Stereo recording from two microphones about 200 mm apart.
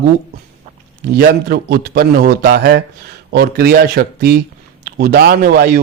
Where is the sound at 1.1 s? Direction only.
55° right (ahead or behind).